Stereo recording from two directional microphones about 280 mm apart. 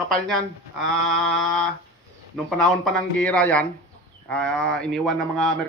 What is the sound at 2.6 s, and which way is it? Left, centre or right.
A man's voice, centre.